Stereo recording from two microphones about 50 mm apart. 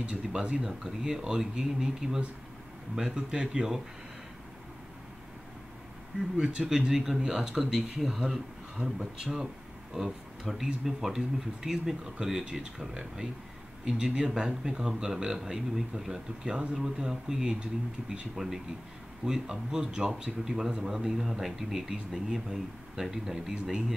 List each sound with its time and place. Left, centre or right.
0.0 s speech: centre
6.4 s speech: centre